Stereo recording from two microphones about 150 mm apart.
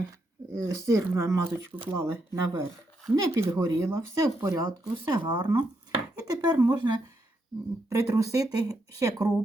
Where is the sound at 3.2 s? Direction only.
15° right (ahead or behind).